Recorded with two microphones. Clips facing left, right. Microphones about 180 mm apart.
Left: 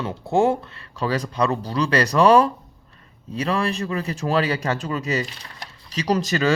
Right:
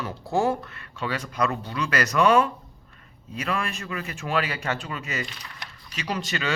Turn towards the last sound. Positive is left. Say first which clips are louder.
# left 9 dB
turn(degrees=40)  # may be behind; listen again after turning